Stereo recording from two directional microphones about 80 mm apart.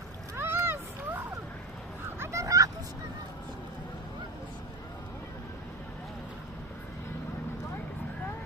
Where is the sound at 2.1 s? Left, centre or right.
Right.